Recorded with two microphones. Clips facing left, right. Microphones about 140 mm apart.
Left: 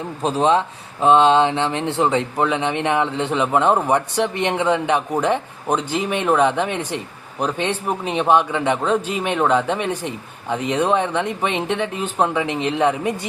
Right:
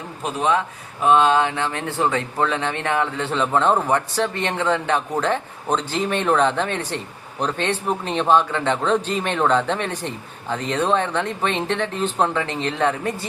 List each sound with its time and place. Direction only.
0.2 s a man's voice: 30° left (ahead or behind); by 13.1 s 15° left (ahead or behind)